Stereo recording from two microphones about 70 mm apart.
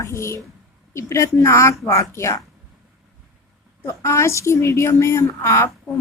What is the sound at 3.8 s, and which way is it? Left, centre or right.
A woman's voice, left.